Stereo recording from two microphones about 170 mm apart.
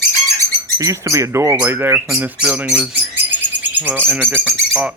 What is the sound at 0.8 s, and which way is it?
Speech, 20° right (ahead or behind).